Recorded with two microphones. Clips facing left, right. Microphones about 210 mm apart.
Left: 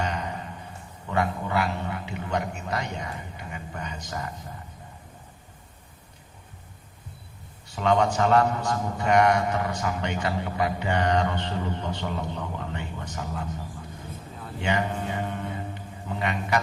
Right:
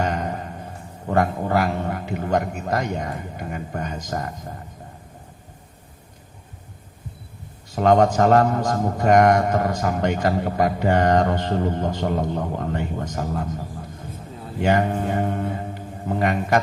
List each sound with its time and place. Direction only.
0.0 s a man's voice: 50° right (ahead or behind)
7.8 s a man's voice: 50° right (ahead or behind)